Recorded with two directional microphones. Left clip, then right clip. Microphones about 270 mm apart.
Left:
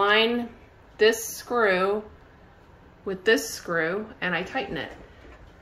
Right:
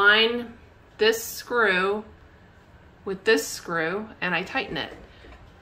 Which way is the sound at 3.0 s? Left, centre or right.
Centre.